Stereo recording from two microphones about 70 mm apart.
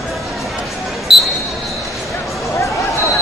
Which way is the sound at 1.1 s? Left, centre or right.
Centre.